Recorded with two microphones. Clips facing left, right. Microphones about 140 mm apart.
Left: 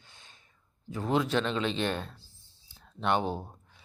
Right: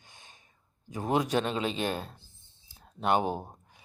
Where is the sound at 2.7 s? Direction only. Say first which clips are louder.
Even; 40° right (ahead or behind).